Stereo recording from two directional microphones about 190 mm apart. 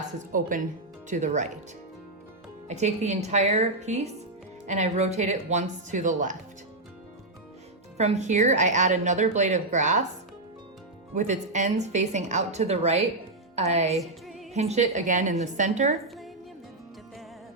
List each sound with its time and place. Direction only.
0.3 s a woman's voice: 45° right (ahead or behind)
2.6 s a woman's voice: 35° right (ahead or behind)
7.9 s a woman's voice: 35° right (ahead or behind)
11.1 s a woman's voice: 40° right (ahead or behind)
14.0 s music: centre (ahead or behind)
14.5 s a woman's voice: 35° right (ahead or behind)